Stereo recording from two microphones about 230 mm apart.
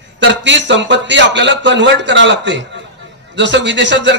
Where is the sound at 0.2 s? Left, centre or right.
Right.